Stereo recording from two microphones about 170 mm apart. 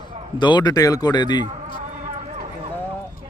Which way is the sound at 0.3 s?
25° left (ahead or behind).